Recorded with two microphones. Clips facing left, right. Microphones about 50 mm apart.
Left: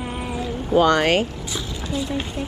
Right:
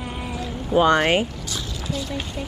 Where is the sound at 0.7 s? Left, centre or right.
Centre.